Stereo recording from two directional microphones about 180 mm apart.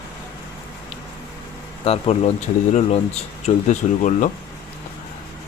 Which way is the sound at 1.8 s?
35° left (ahead or behind).